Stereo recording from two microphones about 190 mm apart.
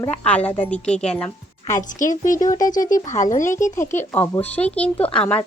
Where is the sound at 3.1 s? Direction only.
40° left (ahead or behind).